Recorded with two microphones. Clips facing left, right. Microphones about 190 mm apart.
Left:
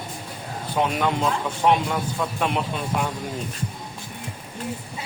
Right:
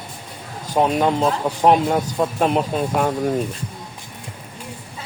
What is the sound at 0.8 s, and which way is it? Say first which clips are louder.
Speech: right 5 dB; 40° right (ahead or behind).